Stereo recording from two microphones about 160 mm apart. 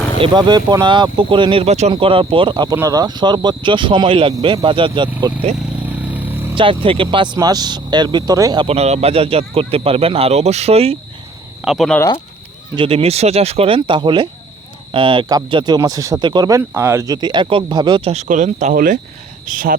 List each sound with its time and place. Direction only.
0.2 s speech: 25° right (ahead or behind)
5.8 s vehicle: 10° right (ahead or behind)
6.6 s speech: 35° right (ahead or behind)
8.6 s speech: 40° right (ahead or behind)
11.6 s speech: centre (ahead or behind)
12.7 s speech: 35° right (ahead or behind)
18.1 s speech: 50° right (ahead or behind)